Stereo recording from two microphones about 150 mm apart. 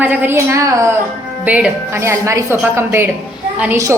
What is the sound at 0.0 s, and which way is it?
A woman's voice, 10° right (ahead or behind).